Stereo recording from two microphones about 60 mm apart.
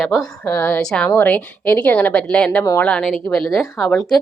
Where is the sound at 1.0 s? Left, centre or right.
Left.